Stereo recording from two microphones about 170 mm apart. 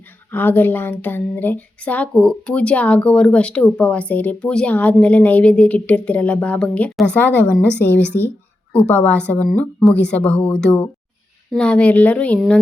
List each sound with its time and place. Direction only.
0.3 s a woman's voice: 10° left (ahead or behind)